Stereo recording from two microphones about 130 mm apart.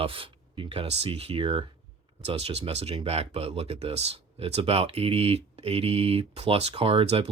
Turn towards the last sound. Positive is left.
turn(degrees=-45)  # may be behind; listen again after turning